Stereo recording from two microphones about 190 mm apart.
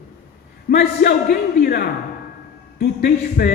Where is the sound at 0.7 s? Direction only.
60° left (ahead or behind).